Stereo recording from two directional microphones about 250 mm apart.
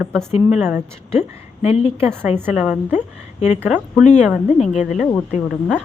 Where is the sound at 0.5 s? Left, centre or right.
Centre.